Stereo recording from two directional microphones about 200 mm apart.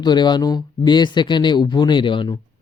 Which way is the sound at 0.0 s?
20° left (ahead or behind).